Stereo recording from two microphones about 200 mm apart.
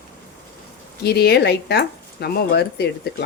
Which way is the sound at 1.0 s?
55° left (ahead or behind).